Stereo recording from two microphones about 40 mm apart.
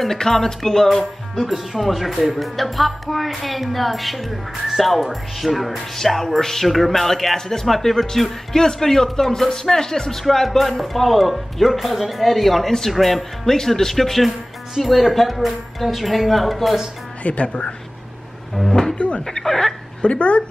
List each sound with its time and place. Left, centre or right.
0.0 s speech: centre
1.3 s speech: centre
17.2 s speech: left
18.7 s a sound: centre
18.9 s speech: left
19.2 s speech: centre
20.0 s speech: left